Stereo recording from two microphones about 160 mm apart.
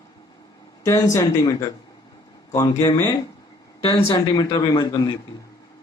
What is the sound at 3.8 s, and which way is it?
Speech, 35° left (ahead or behind).